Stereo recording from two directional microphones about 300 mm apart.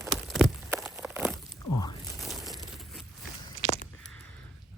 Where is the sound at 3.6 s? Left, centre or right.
Left.